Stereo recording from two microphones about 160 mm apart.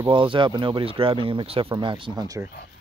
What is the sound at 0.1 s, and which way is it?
Speech, 30° right (ahead or behind).